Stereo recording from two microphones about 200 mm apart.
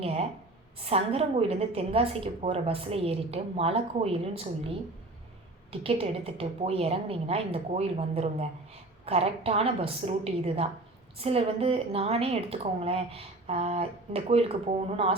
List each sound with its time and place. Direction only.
0.0 s a woman's voice: 30° right (ahead or behind)
5.8 s a woman's voice: 30° right (ahead or behind)